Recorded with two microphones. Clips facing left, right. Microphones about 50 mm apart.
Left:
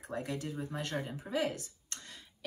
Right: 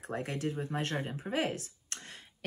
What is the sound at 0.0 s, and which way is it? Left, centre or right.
Speech, right.